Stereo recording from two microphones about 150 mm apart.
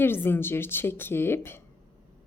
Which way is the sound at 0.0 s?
15° left (ahead or behind).